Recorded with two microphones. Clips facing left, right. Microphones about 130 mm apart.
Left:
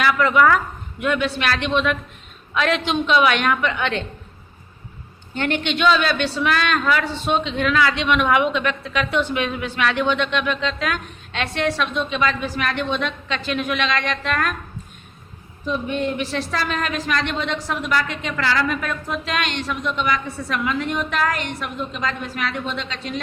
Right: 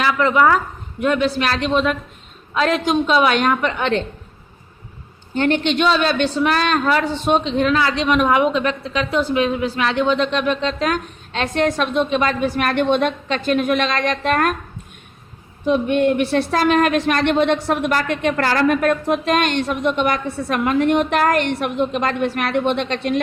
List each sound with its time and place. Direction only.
0.0 s a woman's voice: 30° right (ahead or behind)
5.3 s a woman's voice: 40° right (ahead or behind)
15.6 s speech: 60° right (ahead or behind)